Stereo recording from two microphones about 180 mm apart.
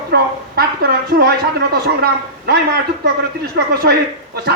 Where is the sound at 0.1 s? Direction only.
60° right (ahead or behind).